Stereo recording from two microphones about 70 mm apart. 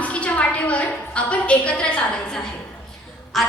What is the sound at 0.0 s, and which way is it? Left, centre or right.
A woman's voice, centre.